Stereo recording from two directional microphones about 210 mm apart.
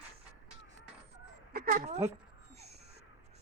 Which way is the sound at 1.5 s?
45° right (ahead or behind).